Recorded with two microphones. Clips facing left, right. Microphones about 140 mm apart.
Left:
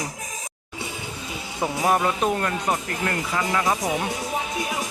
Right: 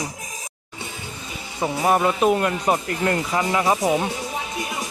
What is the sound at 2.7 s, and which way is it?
Speech, 25° right (ahead or behind).